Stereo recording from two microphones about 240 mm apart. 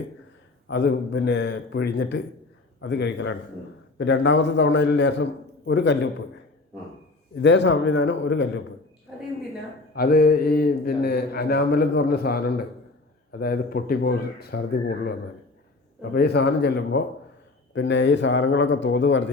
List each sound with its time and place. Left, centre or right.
0.7 s a man's voice: left
7.4 s a man's voice: left
9.9 s a man's voice: left